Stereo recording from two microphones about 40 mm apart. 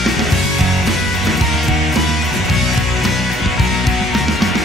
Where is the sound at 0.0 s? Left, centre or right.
Centre.